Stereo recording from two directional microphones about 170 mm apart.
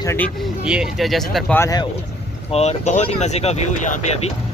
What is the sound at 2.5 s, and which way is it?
Speech, 40° left (ahead or behind).